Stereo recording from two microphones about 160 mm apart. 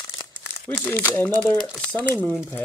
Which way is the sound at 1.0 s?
10° left (ahead or behind).